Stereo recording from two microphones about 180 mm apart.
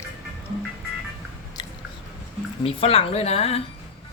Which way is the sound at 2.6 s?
30° left (ahead or behind).